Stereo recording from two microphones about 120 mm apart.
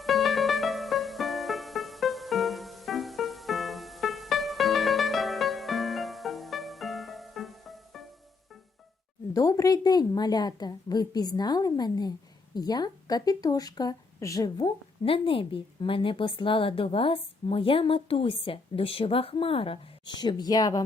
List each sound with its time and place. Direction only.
0.0 s music: centre (ahead or behind)
9.3 s a woman's voice: 30° left (ahead or behind)
15.0 s a woman's voice: 50° left (ahead or behind); by 20.8 s 30° left (ahead or behind)